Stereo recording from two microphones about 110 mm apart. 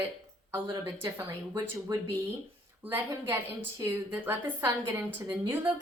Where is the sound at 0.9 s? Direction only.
35° right (ahead or behind).